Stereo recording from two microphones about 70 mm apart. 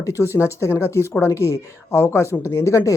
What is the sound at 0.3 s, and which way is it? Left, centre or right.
A woman's voice, left.